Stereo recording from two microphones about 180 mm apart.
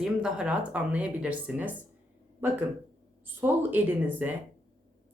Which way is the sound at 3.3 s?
10° right (ahead or behind).